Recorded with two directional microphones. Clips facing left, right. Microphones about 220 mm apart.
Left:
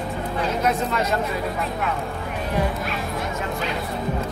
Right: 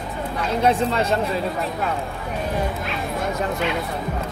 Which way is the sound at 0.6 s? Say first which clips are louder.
Right 6 dB; 30° right (ahead or behind).